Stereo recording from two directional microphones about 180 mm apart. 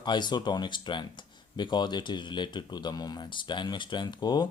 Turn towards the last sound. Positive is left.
turn(degrees=25)  # may be behind; listen again after turning